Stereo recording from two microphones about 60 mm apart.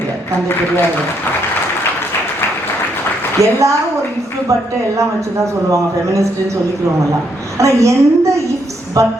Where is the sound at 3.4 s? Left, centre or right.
Right.